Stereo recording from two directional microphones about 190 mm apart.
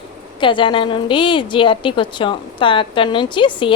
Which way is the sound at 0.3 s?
25° left (ahead or behind).